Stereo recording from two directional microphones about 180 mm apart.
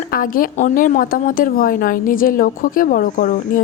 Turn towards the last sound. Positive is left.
turn(degrees=45)  # may be behind; listen again after turning